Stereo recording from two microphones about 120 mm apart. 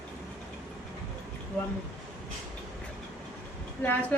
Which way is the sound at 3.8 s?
15° left (ahead or behind).